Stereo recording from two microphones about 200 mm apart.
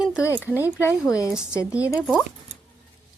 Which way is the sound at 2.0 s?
5° right (ahead or behind).